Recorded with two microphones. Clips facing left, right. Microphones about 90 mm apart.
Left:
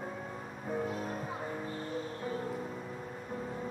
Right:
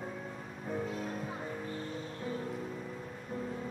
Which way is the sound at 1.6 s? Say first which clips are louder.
Left 2 dB; 35° left (ahead or behind).